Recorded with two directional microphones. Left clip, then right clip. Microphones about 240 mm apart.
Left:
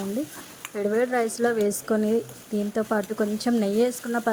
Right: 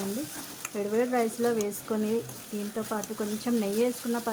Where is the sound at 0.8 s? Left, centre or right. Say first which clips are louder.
Left 4 dB; centre.